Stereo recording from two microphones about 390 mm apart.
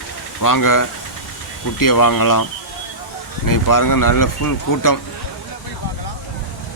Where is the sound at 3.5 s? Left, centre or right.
Left.